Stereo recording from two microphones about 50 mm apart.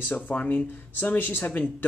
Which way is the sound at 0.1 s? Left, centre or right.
Left.